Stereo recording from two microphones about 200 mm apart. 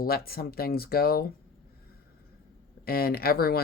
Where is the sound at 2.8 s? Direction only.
50° left (ahead or behind).